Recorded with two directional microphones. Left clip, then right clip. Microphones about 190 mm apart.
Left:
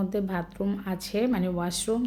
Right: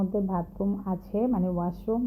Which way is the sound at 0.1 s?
20° left (ahead or behind).